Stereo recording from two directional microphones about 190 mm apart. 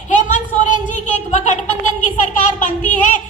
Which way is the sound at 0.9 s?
40° left (ahead or behind).